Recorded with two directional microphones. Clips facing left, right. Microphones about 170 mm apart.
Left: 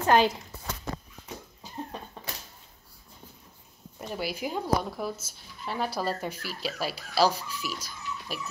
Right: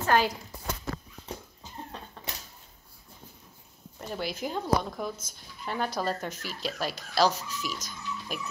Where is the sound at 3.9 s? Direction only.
10° left (ahead or behind).